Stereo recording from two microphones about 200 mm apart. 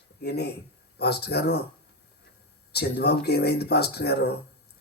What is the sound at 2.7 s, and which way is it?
Speech, 55° left (ahead or behind).